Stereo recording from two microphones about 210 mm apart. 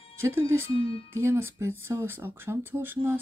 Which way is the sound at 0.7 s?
25° left (ahead or behind).